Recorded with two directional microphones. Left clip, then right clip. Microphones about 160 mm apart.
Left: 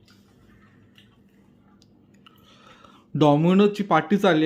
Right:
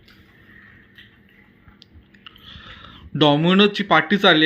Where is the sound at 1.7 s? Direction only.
15° left (ahead or behind).